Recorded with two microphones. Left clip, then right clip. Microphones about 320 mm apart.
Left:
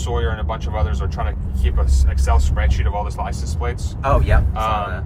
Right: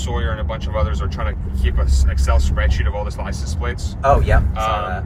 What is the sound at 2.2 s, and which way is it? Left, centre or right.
Speech, left.